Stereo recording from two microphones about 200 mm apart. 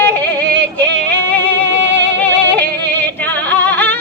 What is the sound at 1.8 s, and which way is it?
Music, 65° right (ahead or behind).